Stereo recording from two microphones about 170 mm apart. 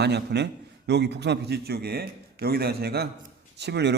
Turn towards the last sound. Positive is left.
turn(degrees=-80)